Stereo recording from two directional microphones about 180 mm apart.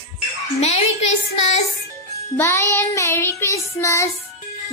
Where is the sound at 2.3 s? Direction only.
15° left (ahead or behind).